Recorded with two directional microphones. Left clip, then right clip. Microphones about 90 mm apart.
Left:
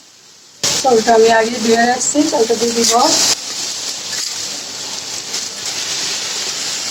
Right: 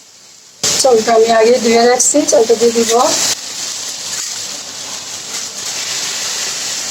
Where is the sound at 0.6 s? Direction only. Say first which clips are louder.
Right 1 dB; 35° right (ahead or behind).